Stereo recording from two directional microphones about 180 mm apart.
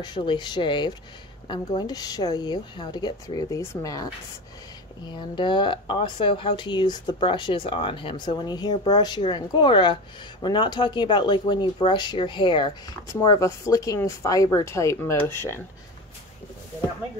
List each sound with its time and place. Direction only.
0.0 s speech: 25° left (ahead or behind)
5.3 s speech: 25° left (ahead or behind)